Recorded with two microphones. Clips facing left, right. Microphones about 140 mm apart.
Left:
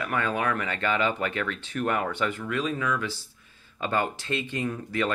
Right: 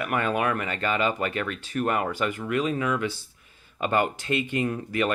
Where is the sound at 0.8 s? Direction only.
40° right (ahead or behind).